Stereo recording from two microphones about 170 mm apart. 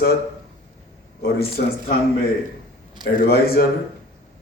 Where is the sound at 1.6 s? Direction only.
55° left (ahead or behind).